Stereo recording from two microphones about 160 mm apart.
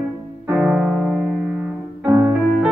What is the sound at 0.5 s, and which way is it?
Music, 5° right (ahead or behind).